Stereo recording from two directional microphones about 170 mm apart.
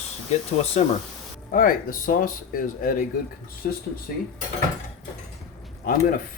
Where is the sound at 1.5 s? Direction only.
55° left (ahead or behind).